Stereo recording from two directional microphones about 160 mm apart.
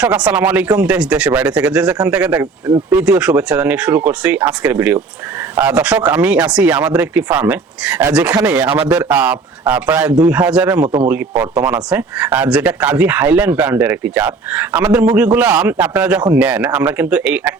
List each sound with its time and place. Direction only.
0.0 s speech: 5° right (ahead or behind)
10.8 s a man's voice: 40° right (ahead or behind)
11.1 s speech: 10° right (ahead or behind)